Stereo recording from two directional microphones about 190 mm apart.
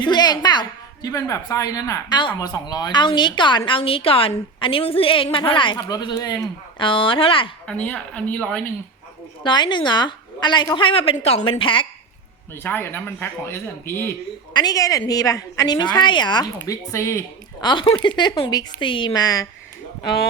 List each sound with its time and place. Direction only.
0.0 s a woman's voice: 20° left (ahead or behind)
7.7 s speech: 5° left (ahead or behind)
9.4 s a woman's voice: 25° left (ahead or behind)
12.5 s a woman's voice: 10° left (ahead or behind)